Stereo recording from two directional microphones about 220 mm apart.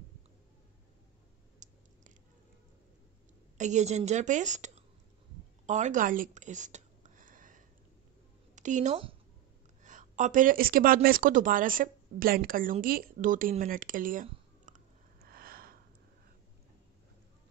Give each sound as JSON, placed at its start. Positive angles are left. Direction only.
{"t": 1.6, "sound": "a sound", "side_deg": -35}
{"t": 3.5, "sound": "speech", "side_deg": -30}
{"t": 5.7, "sound": "a sound", "side_deg": -35}
{"t": 8.5, "sound": "speech", "side_deg": -35}
{"t": 14.7, "sound": "chewing", "side_deg": -35}
{"t": 15.1, "sound": "sniff", "side_deg": -45}